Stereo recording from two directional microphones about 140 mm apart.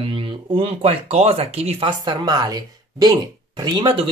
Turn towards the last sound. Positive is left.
turn(degrees=-40)  # may be behind; listen again after turning